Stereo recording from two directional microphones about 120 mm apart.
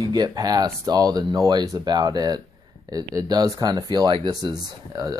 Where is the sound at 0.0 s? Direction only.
35° right (ahead or behind).